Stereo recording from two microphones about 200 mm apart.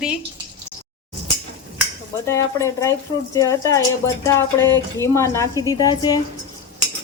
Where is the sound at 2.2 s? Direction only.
15° left (ahead or behind).